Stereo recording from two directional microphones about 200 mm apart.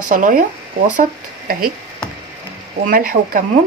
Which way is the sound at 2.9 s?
45° right (ahead or behind).